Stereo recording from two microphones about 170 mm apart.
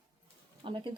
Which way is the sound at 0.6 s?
30° right (ahead or behind).